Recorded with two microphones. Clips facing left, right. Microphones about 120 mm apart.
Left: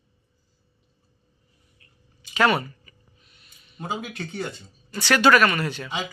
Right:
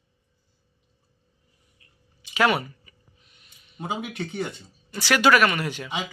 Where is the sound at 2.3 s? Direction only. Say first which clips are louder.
Left 1 dB; 10° right (ahead or behind).